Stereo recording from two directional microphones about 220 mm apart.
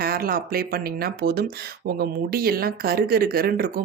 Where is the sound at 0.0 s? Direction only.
40° right (ahead or behind).